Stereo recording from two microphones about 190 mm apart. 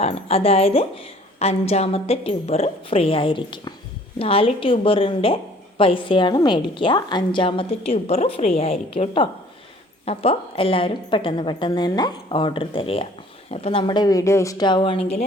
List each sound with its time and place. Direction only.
0.0 s a woman's voice: 30° left (ahead or behind)